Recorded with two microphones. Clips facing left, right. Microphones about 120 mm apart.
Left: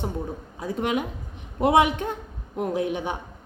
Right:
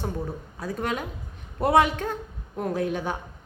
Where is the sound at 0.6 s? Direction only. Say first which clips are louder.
Left 3 dB; 15° left (ahead or behind).